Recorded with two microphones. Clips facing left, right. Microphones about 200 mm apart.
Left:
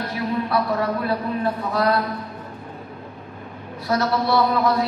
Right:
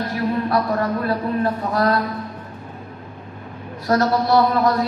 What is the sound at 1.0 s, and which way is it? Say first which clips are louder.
Speech: right 2 dB; 45° right (ahead or behind).